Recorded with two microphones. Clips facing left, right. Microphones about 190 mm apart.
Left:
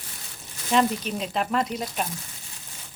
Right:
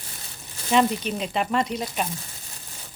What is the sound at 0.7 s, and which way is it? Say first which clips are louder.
Speech: right 2 dB; centre (ahead or behind).